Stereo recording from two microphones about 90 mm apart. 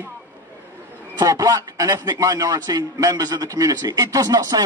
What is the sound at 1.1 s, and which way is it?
A man's voice, 45° right (ahead or behind).